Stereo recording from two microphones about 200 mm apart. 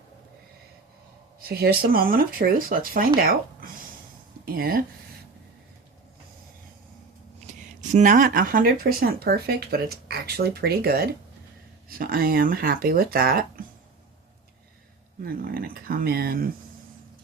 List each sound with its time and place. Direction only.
1.4 s speech: 50° right (ahead or behind)
3.2 s a sound: 45° right (ahead or behind)
4.4 s speech: 50° right (ahead or behind)
7.4 s speech: 35° right (ahead or behind)
15.2 s speech: 45° right (ahead or behind)